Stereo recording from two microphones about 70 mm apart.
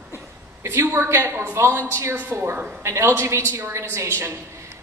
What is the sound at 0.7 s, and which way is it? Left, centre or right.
A woman's voice, right.